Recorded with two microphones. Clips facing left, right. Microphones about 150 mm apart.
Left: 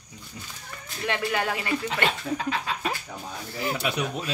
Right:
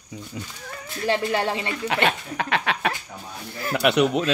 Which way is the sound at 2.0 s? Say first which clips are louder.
Right 2 dB; 70° right (ahead or behind).